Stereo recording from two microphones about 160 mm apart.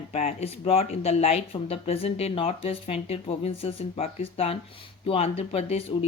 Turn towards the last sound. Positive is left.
turn(degrees=40)  # may be behind; listen again after turning